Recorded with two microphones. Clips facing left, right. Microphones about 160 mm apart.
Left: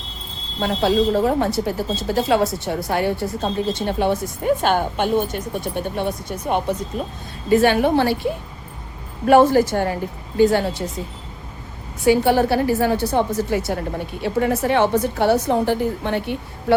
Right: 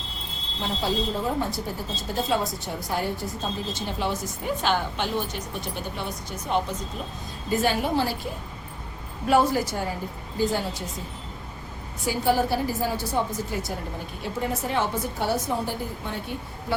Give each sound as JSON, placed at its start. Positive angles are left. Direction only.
{"t": 0.6, "sound": "a woman's voice", "side_deg": 70}
{"t": 7.5, "sound": "a woman's voice", "side_deg": 70}
{"t": 12.0, "sound": "a woman's voice", "side_deg": 70}